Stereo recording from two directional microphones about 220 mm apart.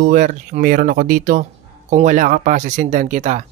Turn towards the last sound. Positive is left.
turn(degrees=-35)  # may be behind; listen again after turning